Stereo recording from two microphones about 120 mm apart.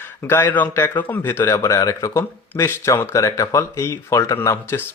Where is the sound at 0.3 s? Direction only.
15° left (ahead or behind).